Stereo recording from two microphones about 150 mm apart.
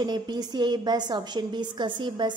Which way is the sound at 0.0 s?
30° right (ahead or behind).